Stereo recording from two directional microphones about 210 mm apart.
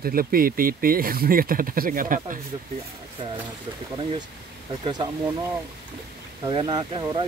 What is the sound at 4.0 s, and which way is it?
Speech, 20° right (ahead or behind).